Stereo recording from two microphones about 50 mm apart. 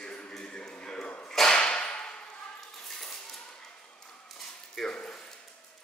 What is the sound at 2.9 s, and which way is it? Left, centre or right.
Cutlery, centre.